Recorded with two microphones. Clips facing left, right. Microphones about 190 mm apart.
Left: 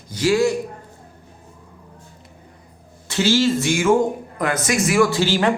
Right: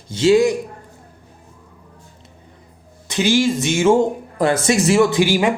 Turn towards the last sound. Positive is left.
turn(degrees=-10)  # may be behind; listen again after turning